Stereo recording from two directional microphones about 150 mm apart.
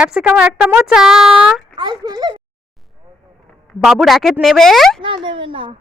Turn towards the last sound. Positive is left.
turn(degrees=-35)  # may be behind; listen again after turning